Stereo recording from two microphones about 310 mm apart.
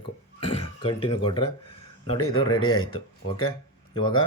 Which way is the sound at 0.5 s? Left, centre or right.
Centre.